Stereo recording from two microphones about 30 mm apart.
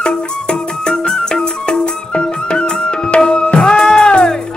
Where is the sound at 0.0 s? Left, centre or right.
Left.